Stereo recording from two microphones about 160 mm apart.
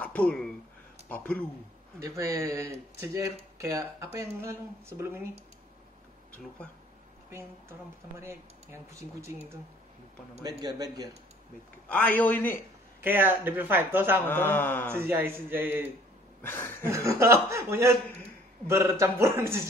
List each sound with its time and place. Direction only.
0.0 s speech: 10° left (ahead or behind)
2.0 s speech: 20° right (ahead or behind)
9.2 s speech: 15° right (ahead or behind)
10.6 s speech: 25° right (ahead or behind)
11.9 s a man's voice: 10° left (ahead or behind)
13.0 s speech: 15° right (ahead or behind)
14.2 s a man's voice: 10° left (ahead or behind)
14.9 s speech: 15° right (ahead or behind)
16.4 s a man's voice: 15° left (ahead or behind)
16.8 s speech: 15° right (ahead or behind)